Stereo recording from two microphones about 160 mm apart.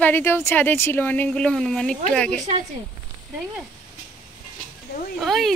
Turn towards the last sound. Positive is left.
turn(degrees=0)  # may be behind; listen again after turning